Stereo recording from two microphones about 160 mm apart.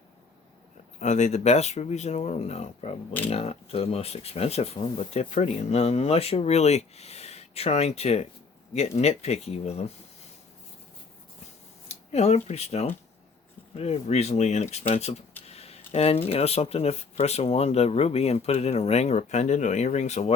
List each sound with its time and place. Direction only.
0.9 s speech: 45° left (ahead or behind)
11.9 s speech: 40° left (ahead or behind)